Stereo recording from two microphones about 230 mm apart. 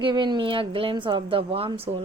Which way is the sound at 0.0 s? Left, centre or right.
Centre.